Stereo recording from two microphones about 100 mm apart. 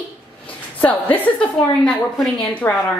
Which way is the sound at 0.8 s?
15° left (ahead or behind).